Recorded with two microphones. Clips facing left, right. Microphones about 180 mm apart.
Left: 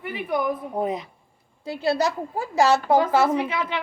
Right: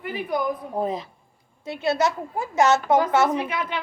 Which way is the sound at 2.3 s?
30° left (ahead or behind).